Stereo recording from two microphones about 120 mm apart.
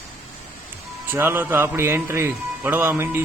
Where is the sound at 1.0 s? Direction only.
20° right (ahead or behind).